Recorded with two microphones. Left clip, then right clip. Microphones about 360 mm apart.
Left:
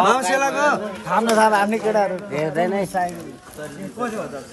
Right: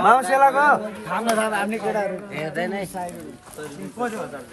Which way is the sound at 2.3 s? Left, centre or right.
Left.